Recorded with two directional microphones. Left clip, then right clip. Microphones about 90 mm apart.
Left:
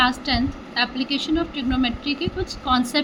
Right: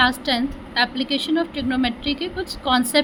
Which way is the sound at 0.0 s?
50° right (ahead or behind).